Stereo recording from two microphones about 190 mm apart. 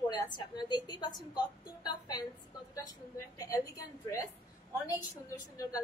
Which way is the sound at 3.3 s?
20° left (ahead or behind).